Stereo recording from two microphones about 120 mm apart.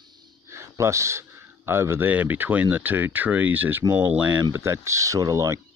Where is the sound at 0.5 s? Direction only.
25° right (ahead or behind).